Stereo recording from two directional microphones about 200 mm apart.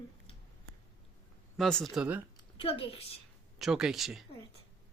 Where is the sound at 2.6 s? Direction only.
25° left (ahead or behind).